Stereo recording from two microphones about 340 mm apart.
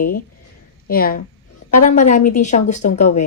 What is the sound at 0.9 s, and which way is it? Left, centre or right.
A woman's voice, left.